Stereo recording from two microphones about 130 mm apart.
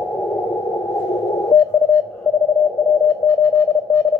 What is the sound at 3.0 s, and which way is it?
Sidetone, 20° left (ahead or behind).